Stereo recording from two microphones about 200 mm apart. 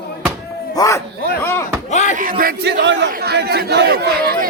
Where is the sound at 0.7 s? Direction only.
15° left (ahead or behind).